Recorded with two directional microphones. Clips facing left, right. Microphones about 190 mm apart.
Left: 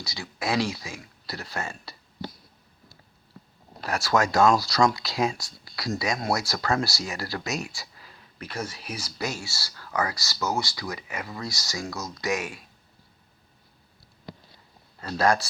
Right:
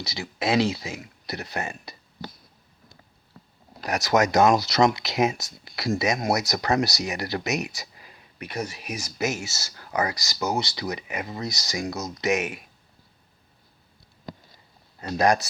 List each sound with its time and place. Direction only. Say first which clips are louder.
0.0 s speech: right 4 dB; 20° right (ahead or behind)
3.8 s speech: right 2 dB; 20° right (ahead or behind)
15.0 s speech: right 2 dB; 20° right (ahead or behind)